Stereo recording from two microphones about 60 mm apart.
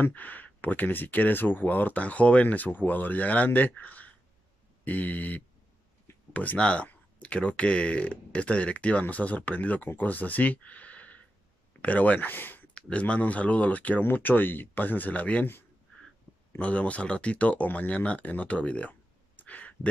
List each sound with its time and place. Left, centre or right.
0.0 s speech: left
12.7 s speech: centre
16.5 s speech: left